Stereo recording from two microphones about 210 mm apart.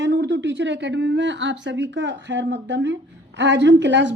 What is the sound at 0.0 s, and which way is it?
Speech, 60° right (ahead or behind).